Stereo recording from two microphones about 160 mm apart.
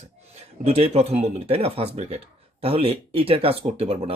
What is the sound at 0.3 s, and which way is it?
Speech, 40° right (ahead or behind).